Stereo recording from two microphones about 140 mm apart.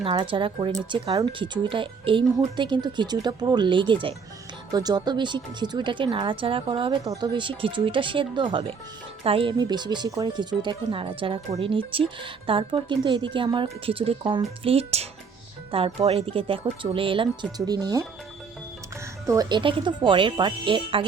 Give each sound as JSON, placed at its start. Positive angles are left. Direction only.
{"t": 0.0, "sound": "a woman's voice", "side_deg": -40}
{"t": 7.0, "sound": "a woman's voice", "side_deg": -25}
{"t": 17.7, "sound": "speech", "side_deg": -25}
{"t": 19.3, "sound": "a woman's voice", "side_deg": -30}